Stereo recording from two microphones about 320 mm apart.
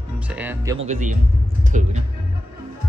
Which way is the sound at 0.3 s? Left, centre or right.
Centre.